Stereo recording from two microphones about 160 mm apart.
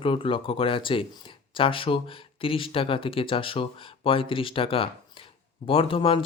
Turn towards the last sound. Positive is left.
turn(degrees=35)  # may be behind; listen again after turning